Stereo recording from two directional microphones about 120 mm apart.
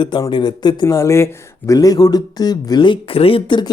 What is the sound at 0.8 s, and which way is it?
Speech, 25° left (ahead or behind).